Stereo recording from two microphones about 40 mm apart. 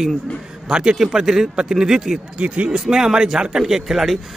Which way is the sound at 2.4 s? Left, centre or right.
Right.